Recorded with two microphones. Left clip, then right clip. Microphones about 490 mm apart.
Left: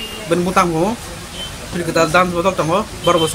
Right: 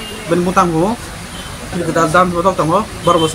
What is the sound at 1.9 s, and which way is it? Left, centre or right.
Speech, left.